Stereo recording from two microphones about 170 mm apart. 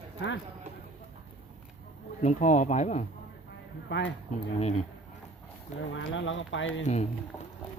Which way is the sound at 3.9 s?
90° left.